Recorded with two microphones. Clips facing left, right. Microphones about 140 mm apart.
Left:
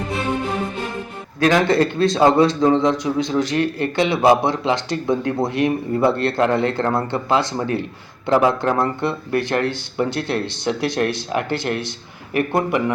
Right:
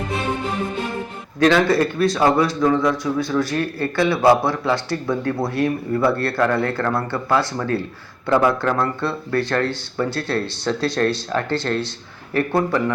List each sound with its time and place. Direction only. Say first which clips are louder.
1.5 s a man's voice: even; 20° left (ahead or behind)